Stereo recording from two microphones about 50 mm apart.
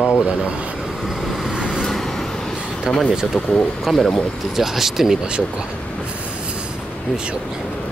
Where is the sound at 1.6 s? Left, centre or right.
Centre.